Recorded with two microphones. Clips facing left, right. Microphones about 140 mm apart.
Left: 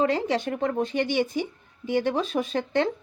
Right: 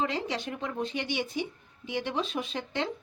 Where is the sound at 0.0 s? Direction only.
50° left (ahead or behind).